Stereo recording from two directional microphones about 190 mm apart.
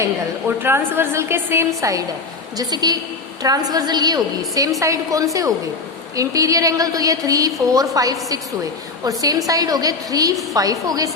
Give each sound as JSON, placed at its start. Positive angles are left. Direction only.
{"t": 0.0, "sound": "a woman's voice", "side_deg": -10}